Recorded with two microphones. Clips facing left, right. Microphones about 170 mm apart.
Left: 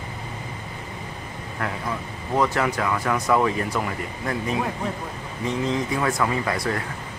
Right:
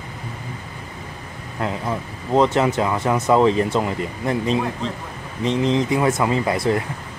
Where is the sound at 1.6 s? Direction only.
20° right (ahead or behind).